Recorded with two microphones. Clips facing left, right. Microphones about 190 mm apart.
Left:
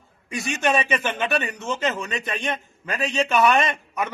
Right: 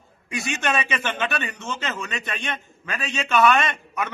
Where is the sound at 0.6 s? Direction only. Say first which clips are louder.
Left 4 dB; 10° left (ahead or behind).